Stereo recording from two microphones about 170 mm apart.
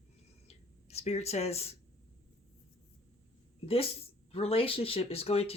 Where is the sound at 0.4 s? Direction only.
40° left (ahead or behind).